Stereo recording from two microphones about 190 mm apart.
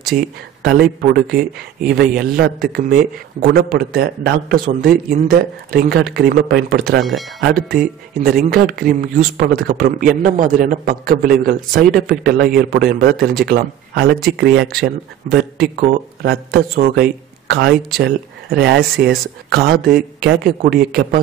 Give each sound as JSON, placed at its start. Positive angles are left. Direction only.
{"t": 0.1, "sound": "speech", "side_deg": -55}
{"t": 7.0, "sound": "speech", "side_deg": 0}
{"t": 7.3, "sound": "speech", "side_deg": -55}
{"t": 16.5, "sound": "speech", "side_deg": -55}